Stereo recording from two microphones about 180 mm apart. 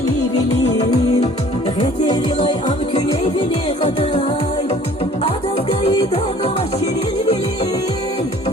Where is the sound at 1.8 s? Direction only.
25° left (ahead or behind).